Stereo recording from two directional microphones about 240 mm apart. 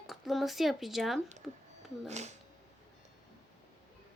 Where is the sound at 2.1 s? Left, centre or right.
Right.